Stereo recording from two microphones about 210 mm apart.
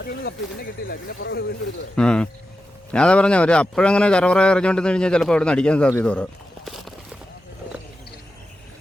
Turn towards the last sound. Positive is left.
turn(degrees=0)  # may be behind; listen again after turning